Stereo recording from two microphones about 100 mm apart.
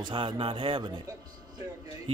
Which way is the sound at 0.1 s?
60° right (ahead or behind).